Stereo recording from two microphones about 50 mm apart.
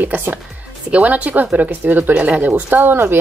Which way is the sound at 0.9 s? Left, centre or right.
Right.